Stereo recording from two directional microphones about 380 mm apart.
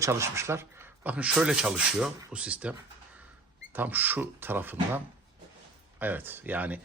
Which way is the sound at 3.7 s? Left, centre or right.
Centre.